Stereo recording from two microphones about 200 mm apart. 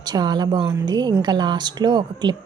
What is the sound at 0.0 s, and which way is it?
A woman's voice, 20° right (ahead or behind).